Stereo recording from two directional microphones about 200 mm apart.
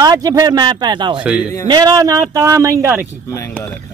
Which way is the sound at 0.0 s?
20° right (ahead or behind).